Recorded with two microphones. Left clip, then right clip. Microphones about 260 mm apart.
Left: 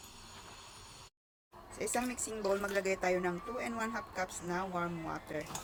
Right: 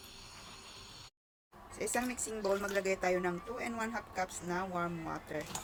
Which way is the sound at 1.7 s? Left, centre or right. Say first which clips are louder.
Even; centre.